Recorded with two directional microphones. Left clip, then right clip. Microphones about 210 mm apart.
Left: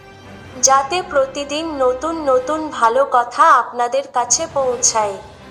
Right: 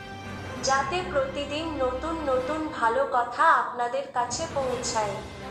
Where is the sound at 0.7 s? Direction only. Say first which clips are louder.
Left 10 dB; 35° left (ahead or behind).